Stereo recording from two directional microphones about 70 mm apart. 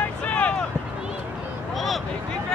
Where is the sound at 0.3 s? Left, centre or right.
Centre.